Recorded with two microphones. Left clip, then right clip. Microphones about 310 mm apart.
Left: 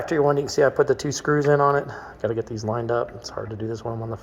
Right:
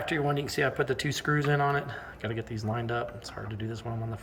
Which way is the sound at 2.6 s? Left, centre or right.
Centre.